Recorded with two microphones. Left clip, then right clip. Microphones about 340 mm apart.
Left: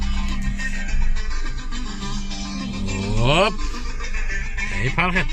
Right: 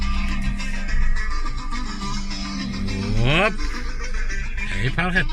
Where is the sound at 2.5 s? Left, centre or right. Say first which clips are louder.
Left 2 dB; left.